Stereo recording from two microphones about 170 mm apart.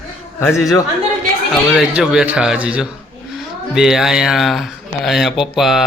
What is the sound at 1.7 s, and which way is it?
Speech, 5° right (ahead or behind).